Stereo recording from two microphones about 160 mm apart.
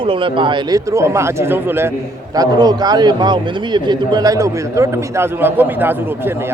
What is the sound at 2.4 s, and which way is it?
Speech, 25° right (ahead or behind).